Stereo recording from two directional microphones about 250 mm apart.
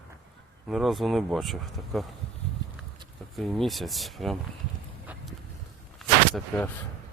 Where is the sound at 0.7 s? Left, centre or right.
Centre.